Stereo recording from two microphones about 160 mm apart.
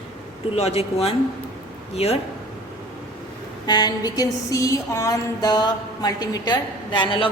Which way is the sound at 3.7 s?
25° left (ahead or behind).